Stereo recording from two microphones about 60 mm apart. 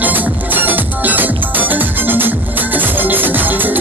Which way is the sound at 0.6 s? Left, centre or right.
Right.